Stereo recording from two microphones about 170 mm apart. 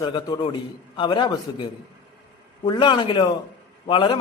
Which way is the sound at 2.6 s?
25° left (ahead or behind).